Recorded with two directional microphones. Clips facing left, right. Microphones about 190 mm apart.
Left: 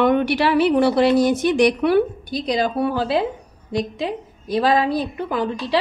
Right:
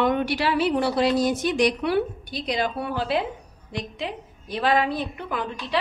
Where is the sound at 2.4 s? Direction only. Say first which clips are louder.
Left 6 dB; 40° left (ahead or behind).